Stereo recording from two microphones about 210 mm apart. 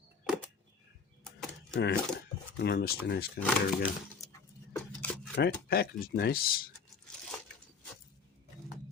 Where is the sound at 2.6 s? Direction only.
50° left (ahead or behind).